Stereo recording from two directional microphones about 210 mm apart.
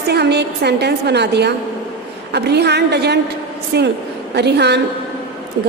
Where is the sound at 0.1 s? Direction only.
55° right (ahead or behind).